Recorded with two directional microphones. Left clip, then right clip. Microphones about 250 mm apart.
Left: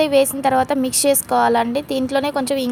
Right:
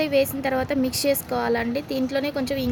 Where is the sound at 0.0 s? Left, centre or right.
Left.